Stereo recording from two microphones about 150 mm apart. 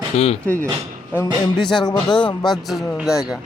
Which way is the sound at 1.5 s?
30° left (ahead or behind).